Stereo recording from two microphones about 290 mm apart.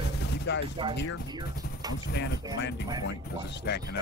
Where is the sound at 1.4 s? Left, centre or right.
Left.